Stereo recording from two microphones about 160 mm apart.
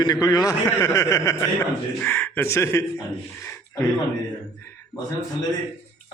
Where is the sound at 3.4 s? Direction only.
15° left (ahead or behind).